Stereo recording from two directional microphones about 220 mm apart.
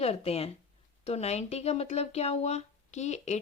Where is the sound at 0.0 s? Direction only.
25° left (ahead or behind).